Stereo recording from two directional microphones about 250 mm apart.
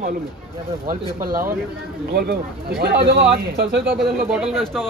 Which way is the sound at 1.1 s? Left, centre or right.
Right.